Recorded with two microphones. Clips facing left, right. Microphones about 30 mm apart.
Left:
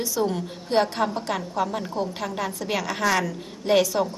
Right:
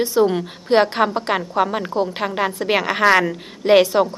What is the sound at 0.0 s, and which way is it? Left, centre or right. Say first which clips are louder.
A woman's voice: right 8 dB; right.